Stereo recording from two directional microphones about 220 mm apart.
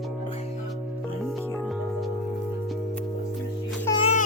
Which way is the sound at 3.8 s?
20° left (ahead or behind).